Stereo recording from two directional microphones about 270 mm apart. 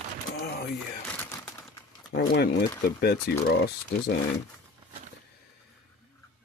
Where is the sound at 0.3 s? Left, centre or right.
Left.